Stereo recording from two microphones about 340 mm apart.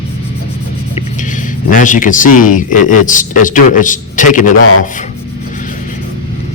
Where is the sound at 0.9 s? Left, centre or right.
Left.